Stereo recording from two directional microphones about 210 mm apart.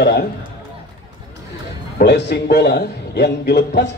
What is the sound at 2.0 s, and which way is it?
A man's voice, 50° left (ahead or behind).